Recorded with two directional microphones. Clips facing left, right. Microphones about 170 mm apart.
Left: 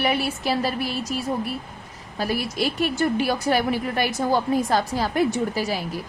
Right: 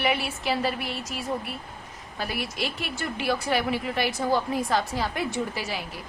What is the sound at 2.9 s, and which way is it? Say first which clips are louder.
A woman's voice: left 6 dB; 40° left (ahead or behind).